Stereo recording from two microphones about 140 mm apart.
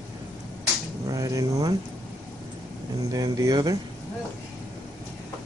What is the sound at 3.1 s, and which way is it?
Speech, 25° right (ahead or behind).